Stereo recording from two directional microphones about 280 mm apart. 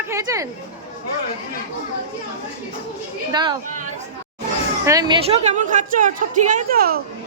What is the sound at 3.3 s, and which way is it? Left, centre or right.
Speech, centre.